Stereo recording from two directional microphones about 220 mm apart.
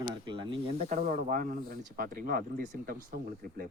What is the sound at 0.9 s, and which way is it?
Speech, 35° right (ahead or behind).